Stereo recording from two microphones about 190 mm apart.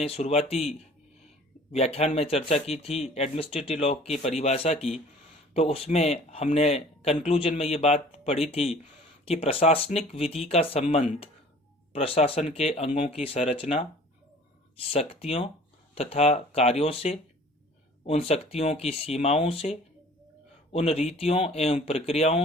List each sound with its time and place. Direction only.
0.0 s speech: 35° left (ahead or behind)
14.9 s speech: 30° left (ahead or behind)
20.7 s speech: 35° left (ahead or behind)